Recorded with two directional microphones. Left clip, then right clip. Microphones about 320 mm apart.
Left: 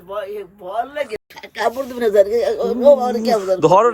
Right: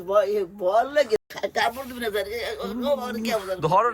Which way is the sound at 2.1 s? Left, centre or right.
Centre.